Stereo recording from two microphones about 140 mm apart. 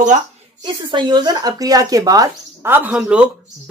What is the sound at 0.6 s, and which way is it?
Speech, 35° right (ahead or behind).